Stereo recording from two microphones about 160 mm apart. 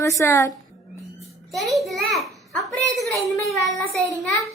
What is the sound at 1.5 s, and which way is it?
Speech, centre (ahead or behind).